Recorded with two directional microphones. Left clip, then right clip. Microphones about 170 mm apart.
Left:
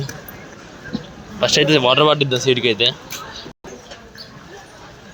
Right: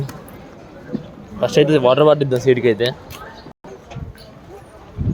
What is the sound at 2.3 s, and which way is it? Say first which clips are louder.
Speech: right 2 dB; 25° right (ahead or behind).